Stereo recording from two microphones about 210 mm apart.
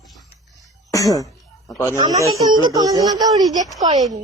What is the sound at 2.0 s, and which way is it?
Speech, 20° right (ahead or behind).